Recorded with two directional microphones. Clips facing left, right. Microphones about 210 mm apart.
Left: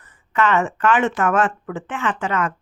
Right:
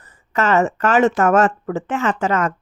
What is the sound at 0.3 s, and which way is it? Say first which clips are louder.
Speech: right 2 dB; 40° right (ahead or behind).